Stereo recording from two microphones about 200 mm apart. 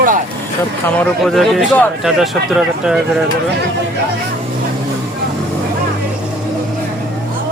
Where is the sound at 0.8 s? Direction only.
5° left (ahead or behind).